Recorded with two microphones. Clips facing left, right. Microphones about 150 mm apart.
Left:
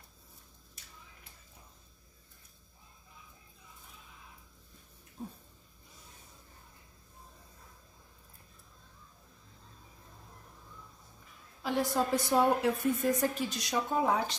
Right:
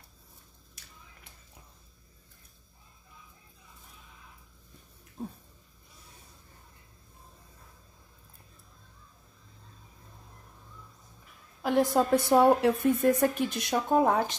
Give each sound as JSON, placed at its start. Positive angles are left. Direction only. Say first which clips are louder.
{"t": 11.6, "sound": "a woman's voice", "louder": "right 6 dB", "side_deg": -50}